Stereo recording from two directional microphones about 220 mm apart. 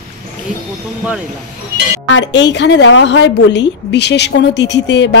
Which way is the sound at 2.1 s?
55° left (ahead or behind).